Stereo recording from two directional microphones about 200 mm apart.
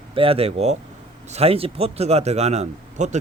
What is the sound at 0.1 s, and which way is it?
A man's voice, 30° right (ahead or behind).